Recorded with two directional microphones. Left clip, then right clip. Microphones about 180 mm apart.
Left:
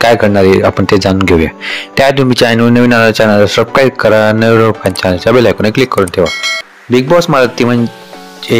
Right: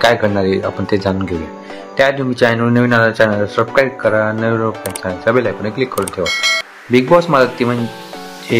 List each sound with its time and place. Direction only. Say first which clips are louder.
0.0 s speech: left 6 dB; 40° left (ahead or behind)
6.2 s speech: left 2 dB; centre (ahead or behind)
6.9 s speech: left 3 dB; 35° left (ahead or behind)